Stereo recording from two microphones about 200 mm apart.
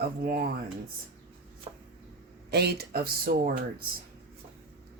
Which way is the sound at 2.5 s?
55° right (ahead or behind).